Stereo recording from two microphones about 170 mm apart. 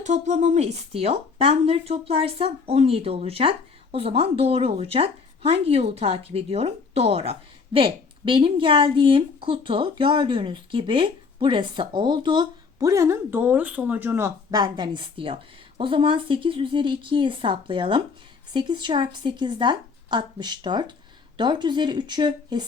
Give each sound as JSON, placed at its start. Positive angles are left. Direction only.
{"t": 0.0, "sound": "speech", "side_deg": -45}